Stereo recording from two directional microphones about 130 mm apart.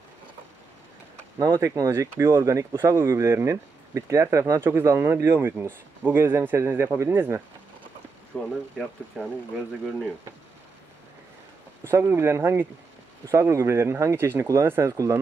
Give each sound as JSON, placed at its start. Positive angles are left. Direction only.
{"t": 1.4, "sound": "speech", "side_deg": -25}
{"t": 8.3, "sound": "speech", "side_deg": 5}
{"t": 11.9, "sound": "speech", "side_deg": -20}